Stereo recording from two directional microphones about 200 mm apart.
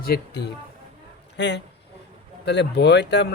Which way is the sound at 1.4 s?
60° left (ahead or behind).